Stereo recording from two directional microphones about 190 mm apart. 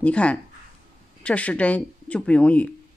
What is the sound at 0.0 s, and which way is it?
Speech, 5° left (ahead or behind).